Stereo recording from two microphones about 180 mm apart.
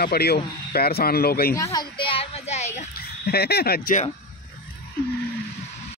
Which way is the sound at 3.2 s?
60° left (ahead or behind).